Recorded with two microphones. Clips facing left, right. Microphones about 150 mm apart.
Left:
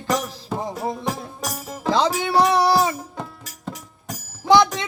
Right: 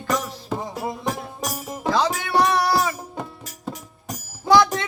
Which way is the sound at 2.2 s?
25° left (ahead or behind).